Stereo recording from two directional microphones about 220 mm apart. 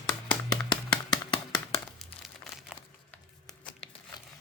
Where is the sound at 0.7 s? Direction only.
20° left (ahead or behind).